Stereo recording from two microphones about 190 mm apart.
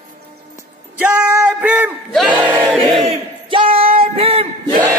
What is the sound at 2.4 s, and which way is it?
Battle cry, 10° right (ahead or behind).